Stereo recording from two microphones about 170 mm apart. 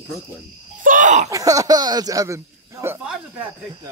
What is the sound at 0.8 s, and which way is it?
Speech, 50° right (ahead or behind).